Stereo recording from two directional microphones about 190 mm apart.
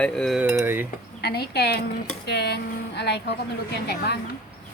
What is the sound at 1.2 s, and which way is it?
Speech, 55° left (ahead or behind).